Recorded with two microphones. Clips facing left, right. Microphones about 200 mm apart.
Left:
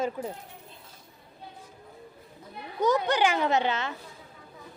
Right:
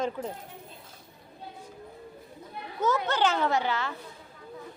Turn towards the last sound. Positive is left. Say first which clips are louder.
# left 1 dB
turn(degrees=20)  # may be behind; listen again after turning